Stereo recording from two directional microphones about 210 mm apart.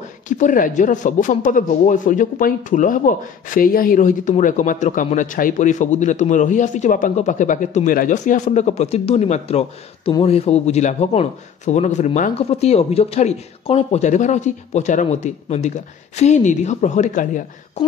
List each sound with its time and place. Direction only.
0.3 s speech: 40° left (ahead or behind)